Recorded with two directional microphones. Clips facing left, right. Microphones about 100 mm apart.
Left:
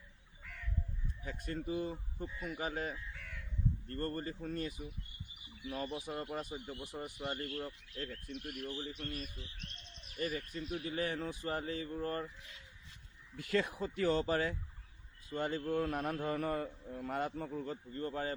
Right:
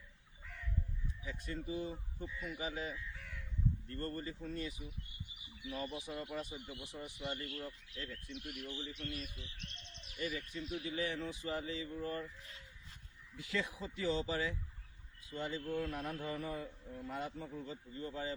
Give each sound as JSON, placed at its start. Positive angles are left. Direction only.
{"t": 1.2, "sound": "a man's voice", "side_deg": 50}
{"t": 12.4, "sound": "speech", "side_deg": -40}
{"t": 13.3, "sound": "a man's voice", "side_deg": 55}